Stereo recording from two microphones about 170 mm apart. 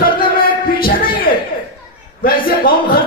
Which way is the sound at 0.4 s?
55° left (ahead or behind).